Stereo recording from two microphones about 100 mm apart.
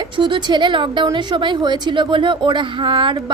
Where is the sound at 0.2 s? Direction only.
50° right (ahead or behind).